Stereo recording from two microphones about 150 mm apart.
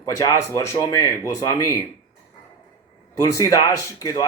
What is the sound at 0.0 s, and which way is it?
Speech, 20° left (ahead or behind).